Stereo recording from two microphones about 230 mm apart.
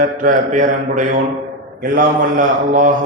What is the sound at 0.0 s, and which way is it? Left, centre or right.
Speech, right.